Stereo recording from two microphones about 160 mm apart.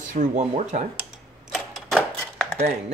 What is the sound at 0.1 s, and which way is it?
Speech, 50° right (ahead or behind).